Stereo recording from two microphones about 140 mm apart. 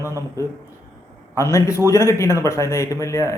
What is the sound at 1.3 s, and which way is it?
A man's voice, 20° left (ahead or behind).